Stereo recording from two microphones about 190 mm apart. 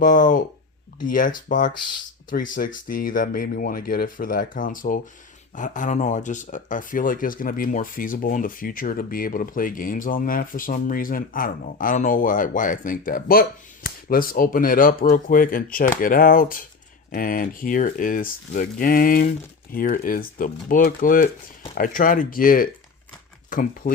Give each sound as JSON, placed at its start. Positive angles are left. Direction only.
{"t": 0.0, "sound": "speech", "side_deg": 45}